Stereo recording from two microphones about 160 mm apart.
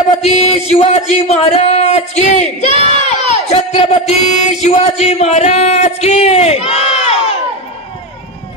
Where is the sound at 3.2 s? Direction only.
45° left (ahead or behind).